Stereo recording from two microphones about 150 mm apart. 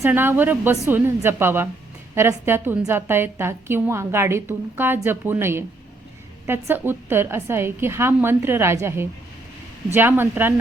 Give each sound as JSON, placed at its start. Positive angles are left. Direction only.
{"t": 0.0, "sound": "a woman's voice", "side_deg": -15}